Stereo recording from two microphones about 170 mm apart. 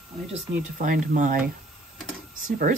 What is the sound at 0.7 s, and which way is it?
Speech, 50° right (ahead or behind).